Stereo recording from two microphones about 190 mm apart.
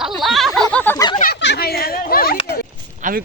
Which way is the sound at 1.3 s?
65° left (ahead or behind).